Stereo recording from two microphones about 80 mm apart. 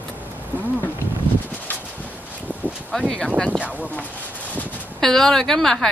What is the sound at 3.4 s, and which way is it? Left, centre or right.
Speech, centre.